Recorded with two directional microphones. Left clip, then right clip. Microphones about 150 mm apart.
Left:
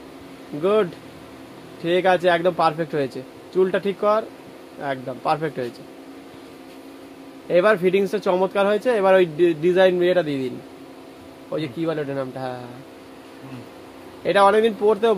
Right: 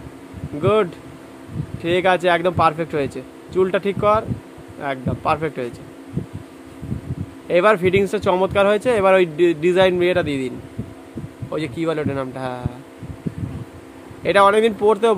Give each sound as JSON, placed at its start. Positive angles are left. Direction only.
{"t": 0.6, "sound": "speech", "side_deg": -10}
{"t": 7.4, "sound": "speech", "side_deg": -10}
{"t": 11.5, "sound": "speech", "side_deg": -15}
{"t": 14.2, "sound": "speech", "side_deg": -15}